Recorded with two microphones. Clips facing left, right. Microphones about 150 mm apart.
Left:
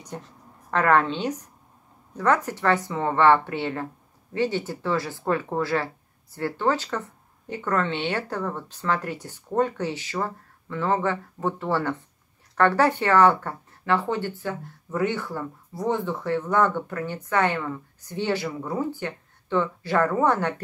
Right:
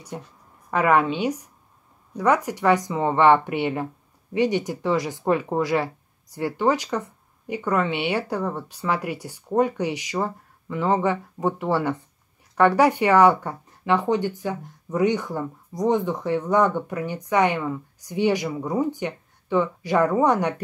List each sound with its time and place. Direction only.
0.1 s speech: 10° right (ahead or behind)